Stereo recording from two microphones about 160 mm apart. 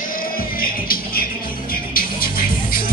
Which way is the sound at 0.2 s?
65° left (ahead or behind).